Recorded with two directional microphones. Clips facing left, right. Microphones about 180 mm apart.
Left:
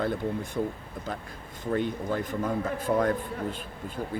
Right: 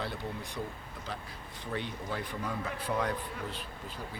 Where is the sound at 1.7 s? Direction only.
45° left (ahead or behind).